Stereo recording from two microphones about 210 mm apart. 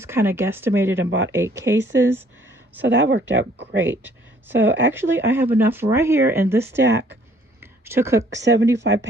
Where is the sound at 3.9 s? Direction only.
10° right (ahead or behind).